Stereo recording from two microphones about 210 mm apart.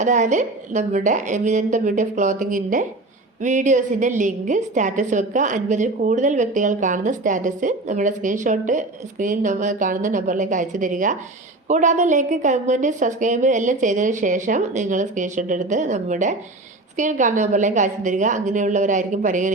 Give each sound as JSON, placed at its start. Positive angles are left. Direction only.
{"t": 0.0, "sound": "a woman's voice", "side_deg": -35}